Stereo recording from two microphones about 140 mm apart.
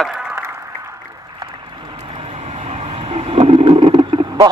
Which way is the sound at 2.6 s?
45° right (ahead or behind).